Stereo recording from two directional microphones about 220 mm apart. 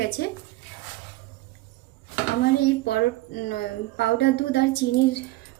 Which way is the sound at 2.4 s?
45° left (ahead or behind).